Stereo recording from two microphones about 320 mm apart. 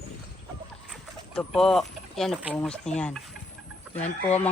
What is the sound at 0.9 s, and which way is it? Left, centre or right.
Speech, centre.